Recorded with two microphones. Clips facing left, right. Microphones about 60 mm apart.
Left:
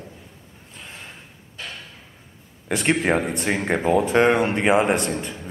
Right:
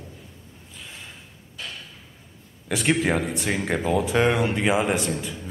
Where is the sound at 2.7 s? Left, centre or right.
Centre.